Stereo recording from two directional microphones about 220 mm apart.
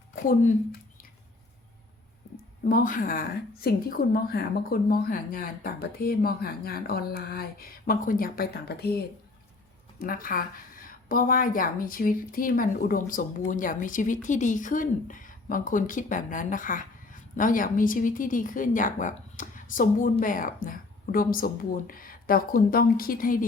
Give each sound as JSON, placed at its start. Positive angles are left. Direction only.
{"t": 2.3, "sound": "a woman's voice", "side_deg": 40}
{"t": 10.0, "sound": "a woman's voice", "side_deg": 40}